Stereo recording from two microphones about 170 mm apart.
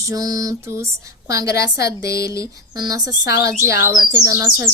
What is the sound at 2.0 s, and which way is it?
Speech, 70° left (ahead or behind).